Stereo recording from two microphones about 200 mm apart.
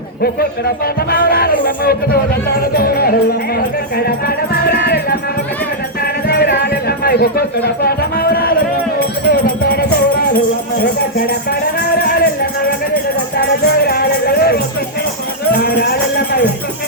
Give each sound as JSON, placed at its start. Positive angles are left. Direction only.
{"t": 1.1, "sound": "speech", "side_deg": 50}
{"t": 4.6, "sound": "music", "side_deg": 55}
{"t": 6.2, "sound": "music", "side_deg": 55}
{"t": 10.2, "sound": "speech", "side_deg": 50}
{"t": 11.8, "sound": "a sound", "side_deg": 50}
{"t": 13.4, "sound": "music", "side_deg": 50}
{"t": 15.5, "sound": "speech", "side_deg": 50}